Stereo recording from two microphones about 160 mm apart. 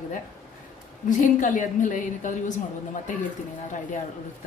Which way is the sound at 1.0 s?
55° left (ahead or behind).